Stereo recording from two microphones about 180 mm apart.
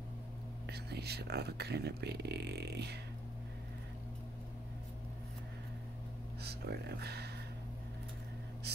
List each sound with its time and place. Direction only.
0.7 s speech: 65° right (ahead or behind)
6.4 s speech: 65° right (ahead or behind)
8.7 s a sound: 65° right (ahead or behind)